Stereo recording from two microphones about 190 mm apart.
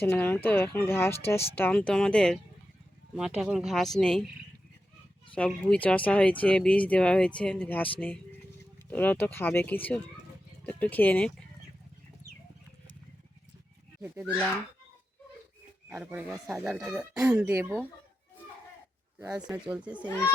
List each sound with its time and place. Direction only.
0.0 s speech: 10° left (ahead or behind)
5.3 s speech: 5° left (ahead or behind)
14.0 s speech: 10° right (ahead or behind)
15.9 s speech: 10° right (ahead or behind)
19.2 s speech: 20° right (ahead or behind)
19.7 s speech: 5° right (ahead or behind)